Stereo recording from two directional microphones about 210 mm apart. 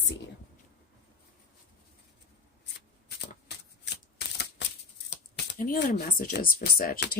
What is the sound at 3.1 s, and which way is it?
Shuffling cards, 50° left (ahead or behind).